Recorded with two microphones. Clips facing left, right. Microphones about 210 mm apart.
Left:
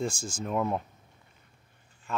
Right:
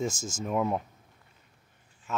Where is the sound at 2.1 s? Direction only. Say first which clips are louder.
Even; 5° right (ahead or behind).